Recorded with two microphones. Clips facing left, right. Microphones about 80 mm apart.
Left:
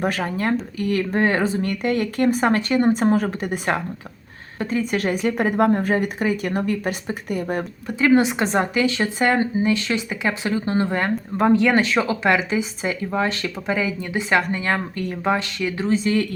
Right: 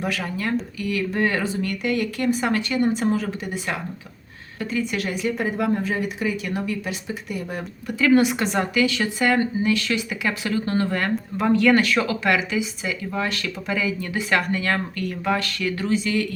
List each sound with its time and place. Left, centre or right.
0.0 s speech: left
7.9 s a woman's voice: left
16.0 s speech: left